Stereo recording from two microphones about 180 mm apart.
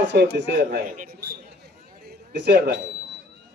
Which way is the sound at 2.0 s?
65° right (ahead or behind).